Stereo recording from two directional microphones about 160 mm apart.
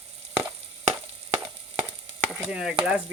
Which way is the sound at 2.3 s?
5° right (ahead or behind).